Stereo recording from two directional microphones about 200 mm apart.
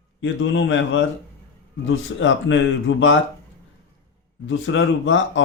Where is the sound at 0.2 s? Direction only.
70° left (ahead or behind).